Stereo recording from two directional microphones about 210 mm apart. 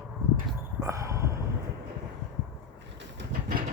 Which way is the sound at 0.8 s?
15° right (ahead or behind).